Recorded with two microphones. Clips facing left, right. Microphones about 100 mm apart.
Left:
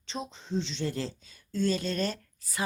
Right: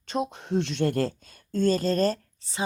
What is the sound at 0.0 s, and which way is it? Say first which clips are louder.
Speech: right 9 dB; 55° right (ahead or behind).